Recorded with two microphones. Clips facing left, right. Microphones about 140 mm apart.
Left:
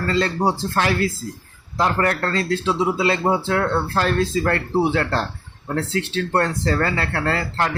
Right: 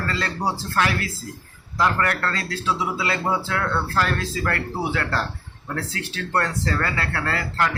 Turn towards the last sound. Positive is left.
turn(degrees=30)  # may be behind; listen again after turning